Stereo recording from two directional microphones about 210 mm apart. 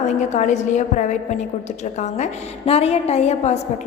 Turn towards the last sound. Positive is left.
turn(degrees=30)  # may be behind; listen again after turning